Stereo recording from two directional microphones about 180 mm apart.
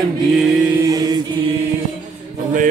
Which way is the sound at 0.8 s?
20° right (ahead or behind).